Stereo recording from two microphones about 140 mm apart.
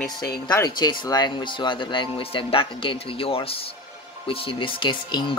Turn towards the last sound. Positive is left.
turn(degrees=35)  # may be behind; listen again after turning